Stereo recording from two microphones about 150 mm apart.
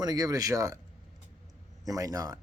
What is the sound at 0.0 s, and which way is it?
Speech, 25° right (ahead or behind).